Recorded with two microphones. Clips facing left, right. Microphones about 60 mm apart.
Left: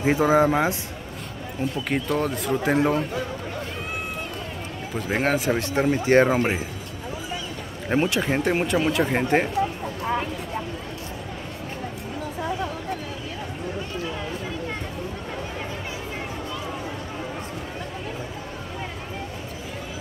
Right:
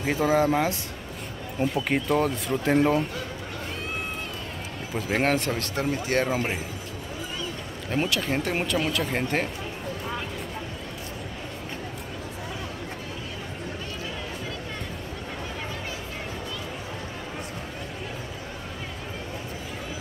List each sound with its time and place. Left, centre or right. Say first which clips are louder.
0.0 s speech: left 4 dB; centre
1.9 s speech: left 1 dB; centre
4.9 s speech: left 1 dB; centre
5.5 s speech: left 6 dB; left
8.0 s speech: left 3 dB; centre